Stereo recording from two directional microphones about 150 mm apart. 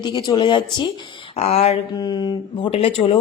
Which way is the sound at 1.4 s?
45° left (ahead or behind).